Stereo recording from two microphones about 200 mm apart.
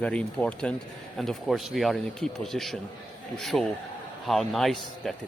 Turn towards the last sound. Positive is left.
turn(degrees=0)  # may be behind; listen again after turning